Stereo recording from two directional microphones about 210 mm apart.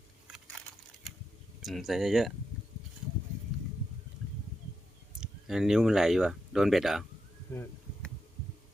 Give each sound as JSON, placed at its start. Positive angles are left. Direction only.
{"t": 1.6, "sound": "speech", "side_deg": 0}
{"t": 5.2, "sound": "speech", "side_deg": 0}
{"t": 7.5, "sound": "a sound", "side_deg": 10}